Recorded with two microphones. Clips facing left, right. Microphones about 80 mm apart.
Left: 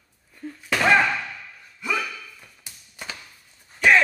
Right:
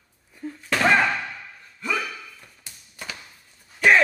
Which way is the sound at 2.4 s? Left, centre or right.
Centre.